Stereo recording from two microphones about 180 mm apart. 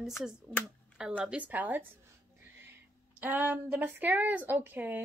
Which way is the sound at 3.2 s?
10° right (ahead or behind).